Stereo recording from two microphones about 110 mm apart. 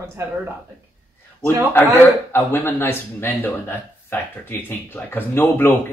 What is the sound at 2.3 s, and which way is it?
Speech, 20° left (ahead or behind).